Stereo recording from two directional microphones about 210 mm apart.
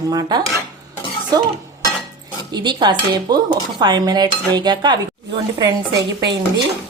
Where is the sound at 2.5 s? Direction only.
20° right (ahead or behind).